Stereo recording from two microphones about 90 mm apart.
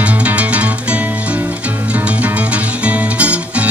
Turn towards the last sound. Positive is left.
turn(degrees=-15)  # may be behind; listen again after turning